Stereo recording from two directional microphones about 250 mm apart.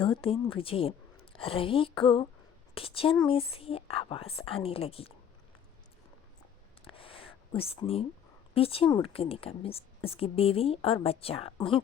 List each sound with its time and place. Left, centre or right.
0.0 s speech: left
6.8 s a sound: left
8.5 s speech: left